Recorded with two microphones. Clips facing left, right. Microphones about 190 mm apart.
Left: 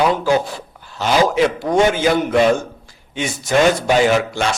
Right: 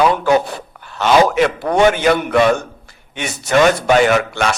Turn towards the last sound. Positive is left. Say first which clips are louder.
# right 1 dB
turn(degrees=-65)  # may be behind; listen again after turning